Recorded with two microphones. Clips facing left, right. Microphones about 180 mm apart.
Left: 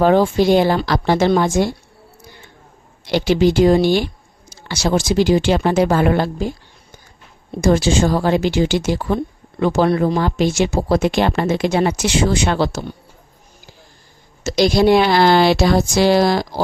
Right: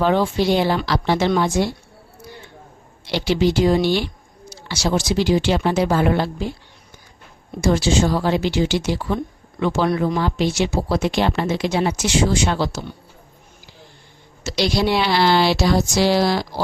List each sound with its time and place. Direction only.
0.0 s speech: 45° left (ahead or behind)
3.1 s speech: 50° left (ahead or behind)
7.6 s speech: 50° left (ahead or behind)
14.4 s speech: 45° left (ahead or behind)